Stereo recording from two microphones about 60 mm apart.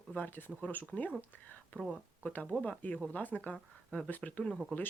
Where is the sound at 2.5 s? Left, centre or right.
Centre.